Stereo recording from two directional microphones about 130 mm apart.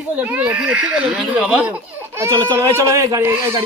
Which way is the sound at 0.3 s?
10° right (ahead or behind).